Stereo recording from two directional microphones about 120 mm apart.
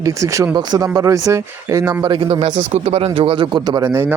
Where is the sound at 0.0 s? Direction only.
25° right (ahead or behind).